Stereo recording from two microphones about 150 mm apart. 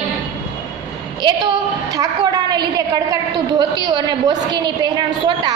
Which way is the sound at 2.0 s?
25° right (ahead or behind).